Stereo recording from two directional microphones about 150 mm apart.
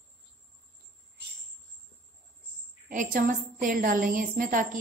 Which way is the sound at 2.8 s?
65° right (ahead or behind).